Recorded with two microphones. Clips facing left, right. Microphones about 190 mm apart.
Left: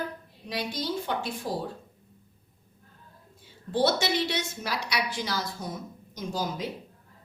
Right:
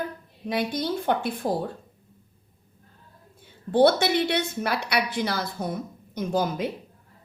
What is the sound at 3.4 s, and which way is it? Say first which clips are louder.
A woman's voice: right 7 dB; 55° right (ahead or behind).